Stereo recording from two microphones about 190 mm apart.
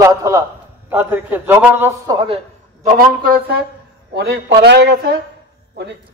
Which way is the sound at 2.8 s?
50° right (ahead or behind).